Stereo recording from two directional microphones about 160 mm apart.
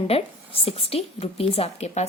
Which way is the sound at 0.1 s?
35° left (ahead or behind).